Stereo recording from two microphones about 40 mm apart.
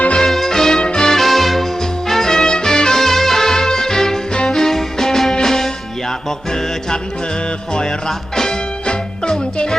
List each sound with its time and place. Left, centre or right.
0.3 s music: centre
1.2 s music: centre